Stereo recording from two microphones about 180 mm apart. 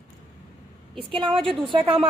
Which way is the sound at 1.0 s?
30° right (ahead or behind).